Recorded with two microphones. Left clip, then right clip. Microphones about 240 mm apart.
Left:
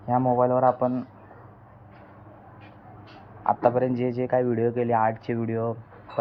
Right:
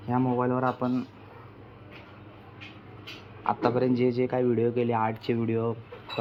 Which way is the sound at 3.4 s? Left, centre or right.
Centre.